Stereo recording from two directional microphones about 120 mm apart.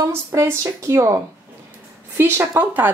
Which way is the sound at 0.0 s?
25° right (ahead or behind).